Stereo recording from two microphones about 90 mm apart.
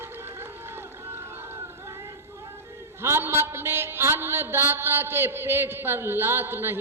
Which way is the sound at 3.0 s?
30° right (ahead or behind).